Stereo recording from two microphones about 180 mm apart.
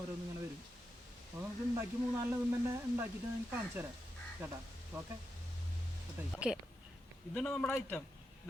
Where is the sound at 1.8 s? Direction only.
15° right (ahead or behind).